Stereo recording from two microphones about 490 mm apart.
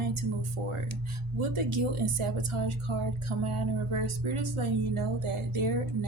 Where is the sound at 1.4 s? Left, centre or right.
Right.